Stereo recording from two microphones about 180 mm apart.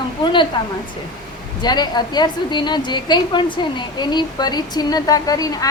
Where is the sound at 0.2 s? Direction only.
25° left (ahead or behind).